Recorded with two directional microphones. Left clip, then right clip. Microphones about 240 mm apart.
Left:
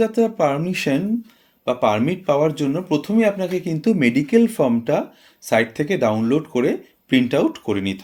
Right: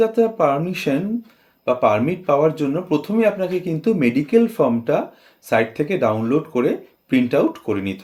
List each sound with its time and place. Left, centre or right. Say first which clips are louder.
0.2 s speech: right 2 dB; left